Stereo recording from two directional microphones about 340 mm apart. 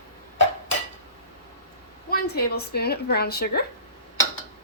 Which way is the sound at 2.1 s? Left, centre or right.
Left.